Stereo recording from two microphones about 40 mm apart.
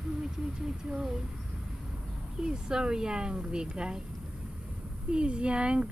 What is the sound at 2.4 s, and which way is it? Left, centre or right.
Speech, centre.